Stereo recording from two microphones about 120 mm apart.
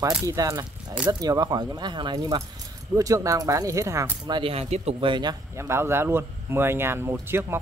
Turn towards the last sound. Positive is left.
turn(degrees=-20)  # may be behind; listen again after turning